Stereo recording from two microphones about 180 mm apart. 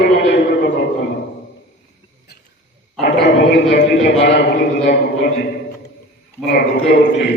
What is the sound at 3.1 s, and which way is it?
A man's voice, 65° left (ahead or behind).